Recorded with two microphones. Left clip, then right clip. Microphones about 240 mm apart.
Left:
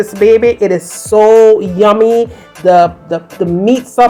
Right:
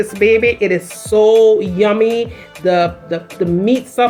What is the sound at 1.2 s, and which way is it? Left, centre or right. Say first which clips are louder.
Music: left 4 dB; left.